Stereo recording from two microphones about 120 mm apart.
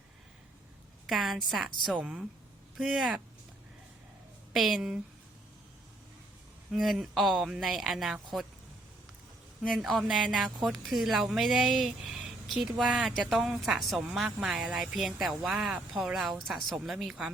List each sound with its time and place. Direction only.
1.0 s speech: centre (ahead or behind)
4.5 s speech: centre (ahead or behind)
6.7 s speech: centre (ahead or behind)
9.6 s speech: centre (ahead or behind)